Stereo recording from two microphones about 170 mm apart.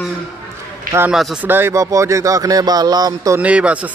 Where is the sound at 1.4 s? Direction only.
10° right (ahead or behind).